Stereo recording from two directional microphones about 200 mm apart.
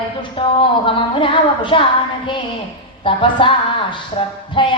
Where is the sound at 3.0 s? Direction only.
25° left (ahead or behind).